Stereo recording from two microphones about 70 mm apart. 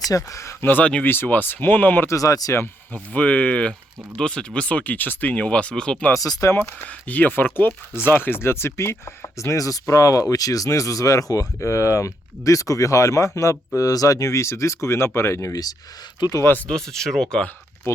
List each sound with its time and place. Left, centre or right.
0.1 s speech: left
0.6 s speech: left
2.0 s speech: left
2.9 s speech: left
6.1 s speech: left
6.6 s speech: left
16.4 s speech: left
16.6 s speech: centre
17.9 s speech: left